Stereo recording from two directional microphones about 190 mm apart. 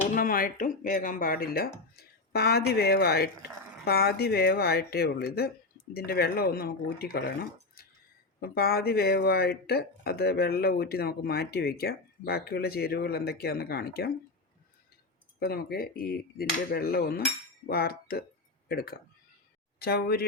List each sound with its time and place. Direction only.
0.1 s speech: 45° left (ahead or behind)
8.4 s speech: 55° left (ahead or behind)
15.4 s speech: 50° left (ahead or behind)